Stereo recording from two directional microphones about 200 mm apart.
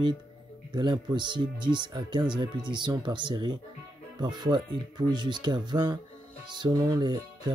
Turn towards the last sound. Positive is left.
turn(degrees=-20)  # may be behind; listen again after turning